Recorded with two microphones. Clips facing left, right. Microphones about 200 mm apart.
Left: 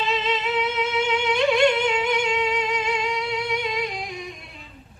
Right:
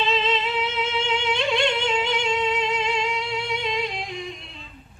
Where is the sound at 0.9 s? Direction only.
25° right (ahead or behind).